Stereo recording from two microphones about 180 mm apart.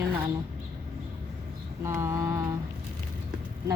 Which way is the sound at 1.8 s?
15° right (ahead or behind).